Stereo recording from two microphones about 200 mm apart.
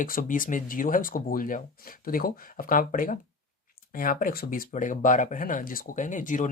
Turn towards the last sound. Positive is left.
turn(degrees=40)  # may be behind; listen again after turning